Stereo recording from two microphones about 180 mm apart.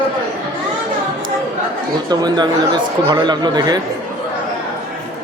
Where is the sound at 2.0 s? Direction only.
25° right (ahead or behind).